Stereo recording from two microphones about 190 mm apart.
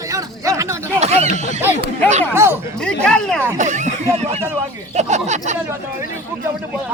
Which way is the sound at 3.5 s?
40° right (ahead or behind).